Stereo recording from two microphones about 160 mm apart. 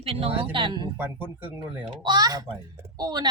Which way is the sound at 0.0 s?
35° right (ahead or behind).